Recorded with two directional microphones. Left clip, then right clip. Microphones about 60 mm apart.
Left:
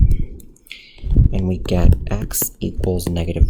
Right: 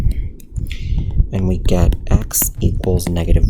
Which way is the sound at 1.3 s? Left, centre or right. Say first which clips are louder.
Right 4 dB; right.